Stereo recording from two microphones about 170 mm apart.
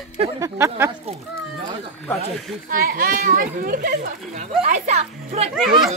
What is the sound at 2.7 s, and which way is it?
A child's voice, 55° right (ahead or behind).